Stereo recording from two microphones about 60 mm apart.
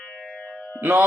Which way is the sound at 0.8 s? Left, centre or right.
Right.